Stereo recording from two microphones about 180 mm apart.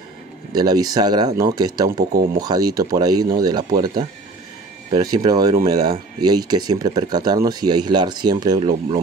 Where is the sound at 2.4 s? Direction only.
20° right (ahead or behind).